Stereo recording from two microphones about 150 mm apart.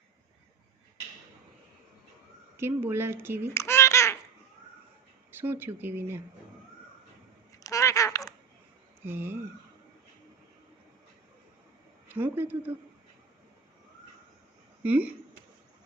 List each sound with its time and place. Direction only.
2.6 s speech: 15° right (ahead or behind)
3.5 s babbling: 20° left (ahead or behind)
5.4 s speech: 15° right (ahead or behind)
7.6 s a sound: 20° left (ahead or behind)
9.0 s speech: 15° right (ahead or behind)
12.0 s speech: 15° right (ahead or behind)
14.8 s speech: 10° right (ahead or behind)